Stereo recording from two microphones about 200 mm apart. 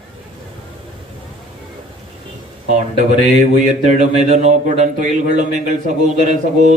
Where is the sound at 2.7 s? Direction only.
40° right (ahead or behind).